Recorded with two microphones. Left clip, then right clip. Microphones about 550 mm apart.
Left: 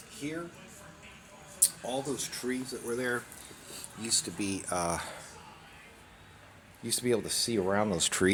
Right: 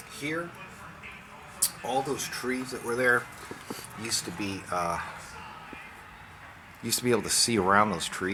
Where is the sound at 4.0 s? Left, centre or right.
Left.